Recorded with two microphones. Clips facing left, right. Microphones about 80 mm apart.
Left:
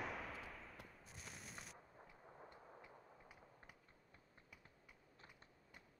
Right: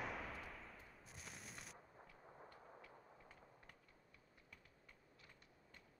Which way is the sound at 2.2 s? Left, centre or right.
Centre.